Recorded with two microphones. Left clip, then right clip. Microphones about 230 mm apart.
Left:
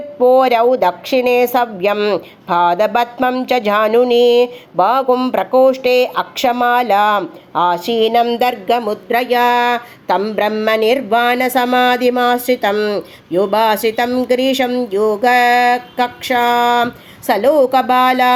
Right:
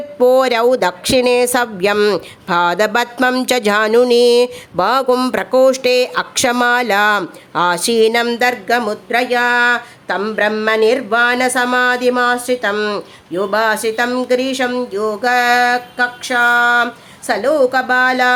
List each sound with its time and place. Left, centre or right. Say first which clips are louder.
0.2 s speech: left 1 dB; right
3.8 s a sound: even; right
4.4 s speech: left 1 dB; right
8.6 s speech: left 1 dB; centre